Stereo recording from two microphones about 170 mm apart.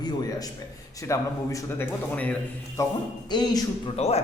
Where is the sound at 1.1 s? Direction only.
15° left (ahead or behind).